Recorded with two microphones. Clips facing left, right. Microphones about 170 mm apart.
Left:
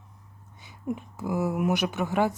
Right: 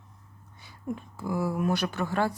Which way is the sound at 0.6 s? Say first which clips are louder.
Left 3 dB; 20° left (ahead or behind).